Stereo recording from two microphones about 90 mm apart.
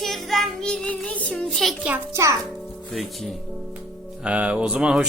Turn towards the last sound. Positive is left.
turn(degrees=-10)  # may be behind; listen again after turning